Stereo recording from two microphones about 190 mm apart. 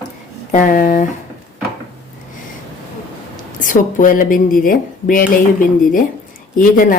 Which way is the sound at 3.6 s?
45° left (ahead or behind).